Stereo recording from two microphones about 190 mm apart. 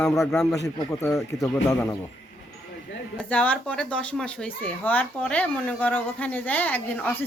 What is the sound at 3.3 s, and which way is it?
Speech, 10° left (ahead or behind).